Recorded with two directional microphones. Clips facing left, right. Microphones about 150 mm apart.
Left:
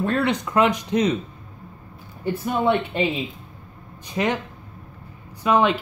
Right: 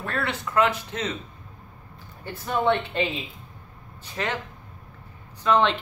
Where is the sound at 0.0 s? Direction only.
20° left (ahead or behind).